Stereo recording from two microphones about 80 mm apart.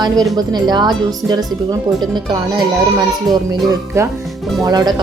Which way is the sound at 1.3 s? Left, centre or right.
Right.